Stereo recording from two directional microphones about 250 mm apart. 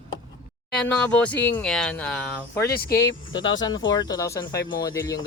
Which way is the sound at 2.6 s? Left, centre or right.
Left.